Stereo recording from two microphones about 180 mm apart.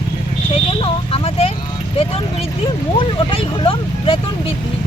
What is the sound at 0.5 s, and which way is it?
Vehicle, 30° left (ahead or behind).